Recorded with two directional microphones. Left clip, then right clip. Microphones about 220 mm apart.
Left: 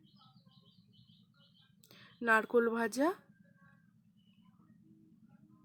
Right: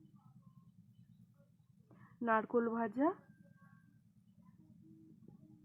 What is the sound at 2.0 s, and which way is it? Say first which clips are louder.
Speech: left 5 dB; 30° left (ahead or behind).